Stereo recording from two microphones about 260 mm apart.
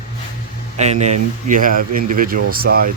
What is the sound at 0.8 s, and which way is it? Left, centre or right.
Speech, right.